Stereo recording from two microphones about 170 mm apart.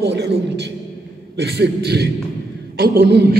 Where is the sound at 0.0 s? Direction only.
75° right (ahead or behind).